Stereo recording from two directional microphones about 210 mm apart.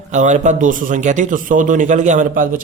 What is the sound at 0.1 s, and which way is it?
Speech, 35° right (ahead or behind).